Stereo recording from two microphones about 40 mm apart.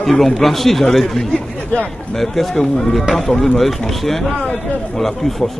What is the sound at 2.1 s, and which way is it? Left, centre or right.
A man's voice, centre.